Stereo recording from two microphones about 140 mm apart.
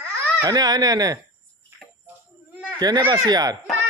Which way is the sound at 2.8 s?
30° right (ahead or behind).